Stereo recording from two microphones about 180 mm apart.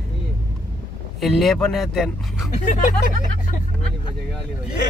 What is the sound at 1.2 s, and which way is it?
Speech, centre (ahead or behind).